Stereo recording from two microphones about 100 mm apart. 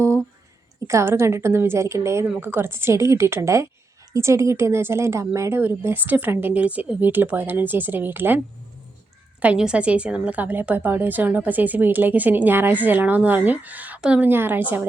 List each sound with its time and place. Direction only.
0.9 s a woman's voice: 30° right (ahead or behind)
9.4 s a woman's voice: 10° right (ahead or behind)